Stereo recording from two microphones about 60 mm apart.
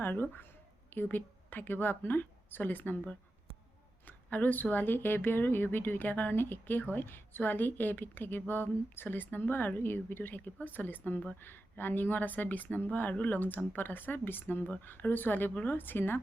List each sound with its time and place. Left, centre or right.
0.0 s a woman's voice: left
4.0 s speech: left